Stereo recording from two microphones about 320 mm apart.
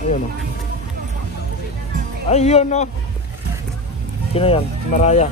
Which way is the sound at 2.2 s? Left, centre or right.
Centre.